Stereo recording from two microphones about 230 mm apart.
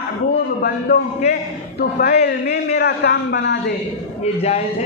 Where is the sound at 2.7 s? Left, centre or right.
Left.